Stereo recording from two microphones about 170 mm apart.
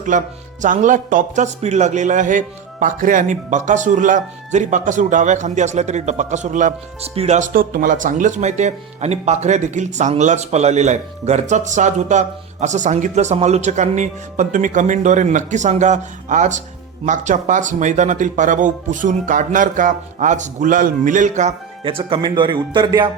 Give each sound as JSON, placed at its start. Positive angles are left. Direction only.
{"t": 0.1, "sound": "speech", "side_deg": -50}
{"t": 21.8, "sound": "speech", "side_deg": -30}